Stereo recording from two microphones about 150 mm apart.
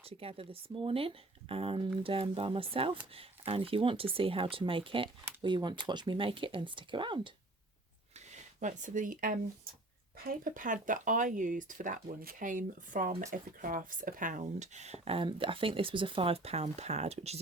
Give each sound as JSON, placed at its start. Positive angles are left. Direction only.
{"t": 0.0, "sound": "speech", "side_deg": -40}
{"t": 8.6, "sound": "speech", "side_deg": -60}